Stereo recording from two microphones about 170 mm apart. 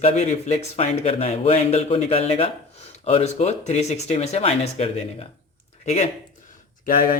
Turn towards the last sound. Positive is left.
turn(degrees=60)  # may be behind; listen again after turning